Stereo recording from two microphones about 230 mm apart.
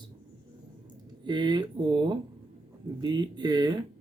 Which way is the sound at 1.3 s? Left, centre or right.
Centre.